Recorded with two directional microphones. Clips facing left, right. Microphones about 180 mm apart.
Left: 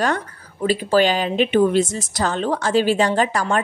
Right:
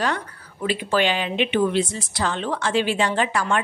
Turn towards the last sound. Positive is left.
turn(degrees=40)  # may be behind; listen again after turning